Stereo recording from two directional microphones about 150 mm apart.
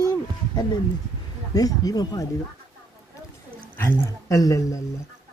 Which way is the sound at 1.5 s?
25° left (ahead or behind).